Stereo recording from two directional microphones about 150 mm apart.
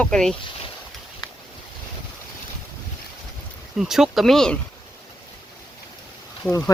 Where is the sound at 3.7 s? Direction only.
Centre (ahead or behind).